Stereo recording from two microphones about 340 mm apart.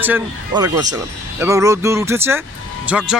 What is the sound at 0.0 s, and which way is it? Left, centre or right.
Speech, centre.